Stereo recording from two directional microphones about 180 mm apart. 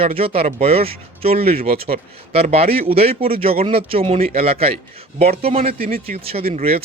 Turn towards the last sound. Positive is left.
turn(degrees=-35)  # may be behind; listen again after turning